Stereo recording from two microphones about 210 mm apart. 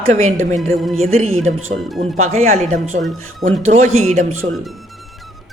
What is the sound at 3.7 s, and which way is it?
Speech, 35° right (ahead or behind).